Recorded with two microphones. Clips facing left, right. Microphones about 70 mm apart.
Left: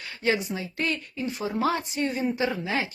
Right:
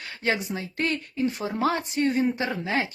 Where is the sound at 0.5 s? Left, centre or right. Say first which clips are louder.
Right 1 dB; right.